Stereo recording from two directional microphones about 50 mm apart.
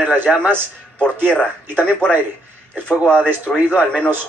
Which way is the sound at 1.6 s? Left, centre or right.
Right.